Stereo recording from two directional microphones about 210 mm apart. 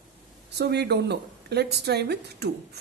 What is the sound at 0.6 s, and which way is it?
Speech, 50° right (ahead or behind).